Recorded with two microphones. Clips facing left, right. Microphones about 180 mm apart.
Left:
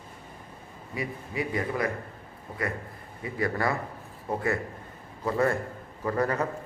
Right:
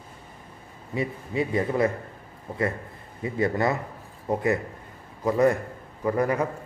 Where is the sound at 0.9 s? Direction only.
25° right (ahead or behind).